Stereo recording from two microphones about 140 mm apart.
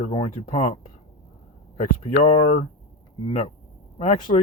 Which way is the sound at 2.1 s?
55° left (ahead or behind).